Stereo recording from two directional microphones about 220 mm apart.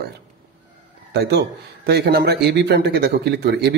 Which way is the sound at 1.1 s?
45° right (ahead or behind).